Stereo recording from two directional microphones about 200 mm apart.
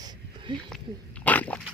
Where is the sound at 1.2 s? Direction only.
5° left (ahead or behind).